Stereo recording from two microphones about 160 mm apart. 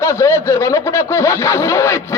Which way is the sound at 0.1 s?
15° left (ahead or behind).